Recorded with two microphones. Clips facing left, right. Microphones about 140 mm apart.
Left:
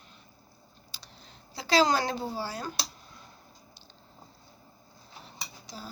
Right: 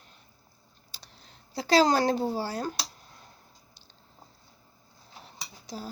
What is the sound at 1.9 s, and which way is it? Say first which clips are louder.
Speech: right 4 dB; 45° right (ahead or behind).